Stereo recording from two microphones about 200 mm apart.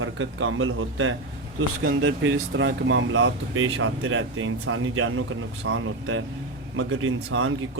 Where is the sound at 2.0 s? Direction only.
70° right (ahead or behind).